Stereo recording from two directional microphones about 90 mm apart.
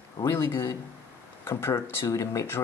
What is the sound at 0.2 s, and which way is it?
Speech, 30° left (ahead or behind).